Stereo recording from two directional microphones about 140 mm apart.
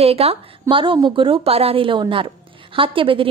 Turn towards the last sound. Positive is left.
turn(degrees=-40)  # may be behind; listen again after turning